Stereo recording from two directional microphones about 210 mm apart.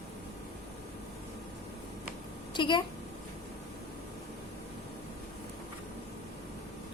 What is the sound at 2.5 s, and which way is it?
Speech, 20° left (ahead or behind).